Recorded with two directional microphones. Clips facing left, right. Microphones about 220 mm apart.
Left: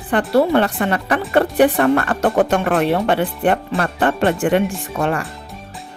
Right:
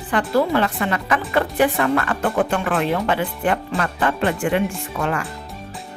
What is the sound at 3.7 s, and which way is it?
Speech, 30° left (ahead or behind).